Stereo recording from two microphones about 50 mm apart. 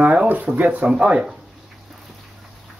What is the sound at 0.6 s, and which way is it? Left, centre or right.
Speech, right.